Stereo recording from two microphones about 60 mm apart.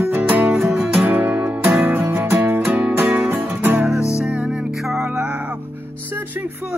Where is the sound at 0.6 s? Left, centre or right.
Centre.